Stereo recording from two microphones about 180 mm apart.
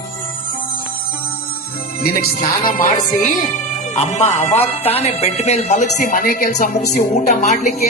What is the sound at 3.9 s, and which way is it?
Speech, 40° left (ahead or behind).